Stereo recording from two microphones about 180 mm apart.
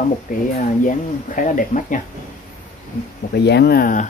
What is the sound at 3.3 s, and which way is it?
Speech, 65° left (ahead or behind).